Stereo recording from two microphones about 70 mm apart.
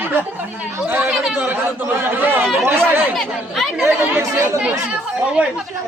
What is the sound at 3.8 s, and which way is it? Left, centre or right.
Speech, right.